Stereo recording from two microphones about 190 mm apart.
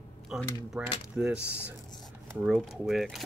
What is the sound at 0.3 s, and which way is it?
Speech, centre (ahead or behind).